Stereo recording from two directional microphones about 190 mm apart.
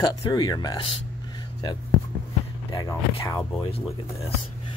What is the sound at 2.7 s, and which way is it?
Speech, 20° left (ahead or behind).